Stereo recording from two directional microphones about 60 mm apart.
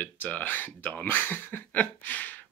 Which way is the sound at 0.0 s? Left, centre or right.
Left.